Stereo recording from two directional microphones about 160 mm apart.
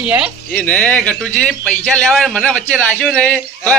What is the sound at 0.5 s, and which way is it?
A man's voice, 10° left (ahead or behind).